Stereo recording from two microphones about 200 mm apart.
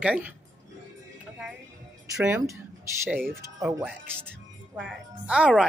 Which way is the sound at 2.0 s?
10° right (ahead or behind).